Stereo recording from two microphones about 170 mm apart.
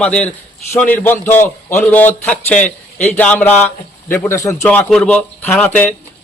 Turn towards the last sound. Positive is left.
turn(degrees=10)  # may be behind; listen again after turning